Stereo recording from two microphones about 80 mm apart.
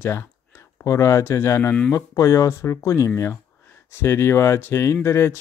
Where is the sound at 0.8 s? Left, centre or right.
Left.